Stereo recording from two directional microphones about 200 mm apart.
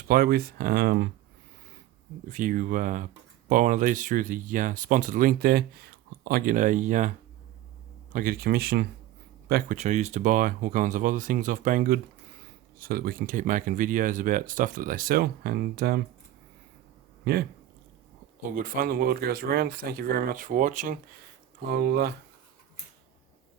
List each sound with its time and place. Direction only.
0.1 s speech: 50° right (ahead or behind)
2.3 s speech: 40° right (ahead or behind)
8.1 s speech: 45° right (ahead or behind)
9.7 s speech: 35° right (ahead or behind)
17.3 s speech: 55° right (ahead or behind)
18.5 s speech: 45° right (ahead or behind)
21.7 s speech: 50° right (ahead or behind)